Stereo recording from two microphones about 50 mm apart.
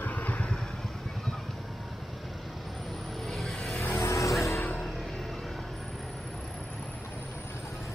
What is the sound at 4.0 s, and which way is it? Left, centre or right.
Music, left.